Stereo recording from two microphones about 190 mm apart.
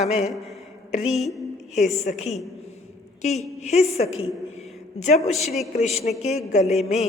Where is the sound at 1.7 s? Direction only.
40° left (ahead or behind).